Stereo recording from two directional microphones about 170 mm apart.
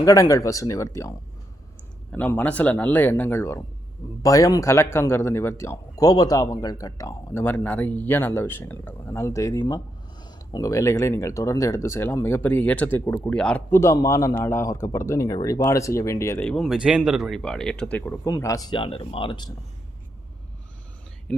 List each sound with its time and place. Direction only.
0.0 s speech: 20° left (ahead or behind)
2.1 s speech: 10° left (ahead or behind)
16.5 s speech: centre (ahead or behind)
18.3 s speech: 20° left (ahead or behind)
21.3 s speech: 10° left (ahead or behind)